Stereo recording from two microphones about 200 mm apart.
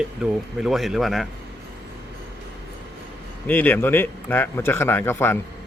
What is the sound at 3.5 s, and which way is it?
A man's voice, 10° left (ahead or behind).